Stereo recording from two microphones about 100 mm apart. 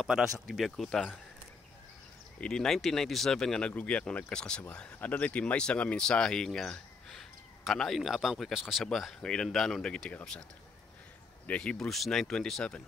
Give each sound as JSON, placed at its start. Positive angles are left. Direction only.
{"t": 0.0, "sound": "speech", "side_deg": -5}
{"t": 2.4, "sound": "speech", "side_deg": 5}
{"t": 11.4, "sound": "speech", "side_deg": 10}